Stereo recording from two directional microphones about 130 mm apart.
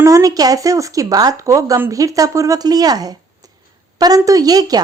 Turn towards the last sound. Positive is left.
turn(degrees=-30)  # may be behind; listen again after turning